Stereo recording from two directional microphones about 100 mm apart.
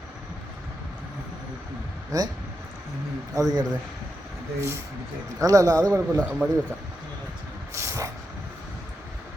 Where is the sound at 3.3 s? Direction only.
40° right (ahead or behind).